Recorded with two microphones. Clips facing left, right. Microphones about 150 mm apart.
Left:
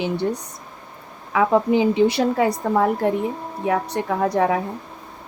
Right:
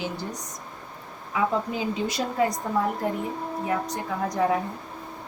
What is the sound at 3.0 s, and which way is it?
Speech, 90° left.